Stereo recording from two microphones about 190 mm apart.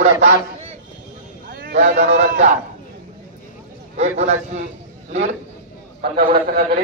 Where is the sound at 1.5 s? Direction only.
50° right (ahead or behind).